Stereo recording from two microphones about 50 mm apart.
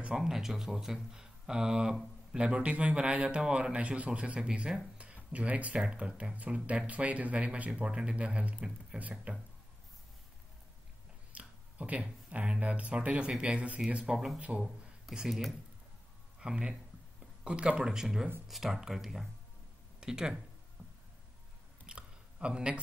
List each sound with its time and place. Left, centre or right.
0.1 s speech: centre; by 9.3 s right
11.3 s speech: right
14.1 s speech: centre
21.8 s a sound: centre